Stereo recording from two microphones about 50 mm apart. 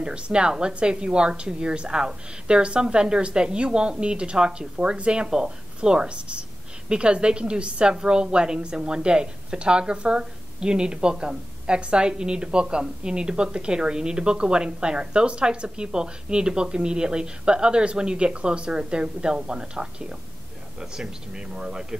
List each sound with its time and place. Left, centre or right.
0.0 s a woman's voice: centre